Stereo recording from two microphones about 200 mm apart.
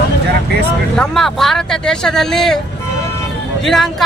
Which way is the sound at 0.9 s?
Centre (ahead or behind).